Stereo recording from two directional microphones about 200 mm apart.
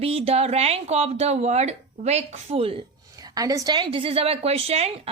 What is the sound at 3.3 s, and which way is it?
A woman's voice, 20° right (ahead or behind).